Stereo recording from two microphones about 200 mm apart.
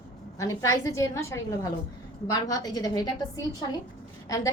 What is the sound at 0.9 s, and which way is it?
A woman's voice, 15° left (ahead or behind).